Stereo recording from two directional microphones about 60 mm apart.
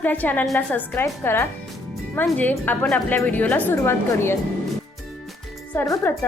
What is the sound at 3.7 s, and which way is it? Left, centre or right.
Speech, left.